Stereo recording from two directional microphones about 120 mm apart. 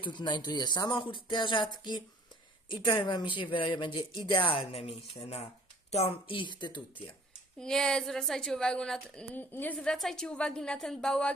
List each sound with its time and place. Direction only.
0.0 s speech: 40° left (ahead or behind); by 5.5 s 65° left (ahead or behind)
5.9 s speech: 55° left (ahead or behind)
7.6 s a woman's voice: 5° left (ahead or behind)